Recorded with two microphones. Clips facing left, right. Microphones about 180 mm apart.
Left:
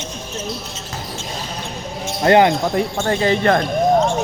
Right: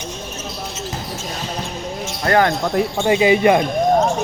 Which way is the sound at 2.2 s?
20° left (ahead or behind).